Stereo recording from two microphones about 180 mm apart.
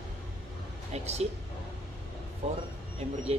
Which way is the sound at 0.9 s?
35° right (ahead or behind).